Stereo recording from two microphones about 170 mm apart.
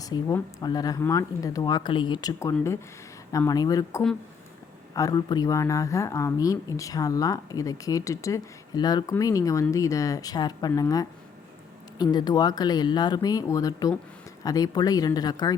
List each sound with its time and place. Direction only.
0.0 s a woman's voice: 20° left (ahead or behind)